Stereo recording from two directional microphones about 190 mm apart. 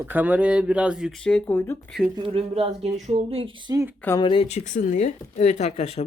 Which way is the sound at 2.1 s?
30° right (ahead or behind).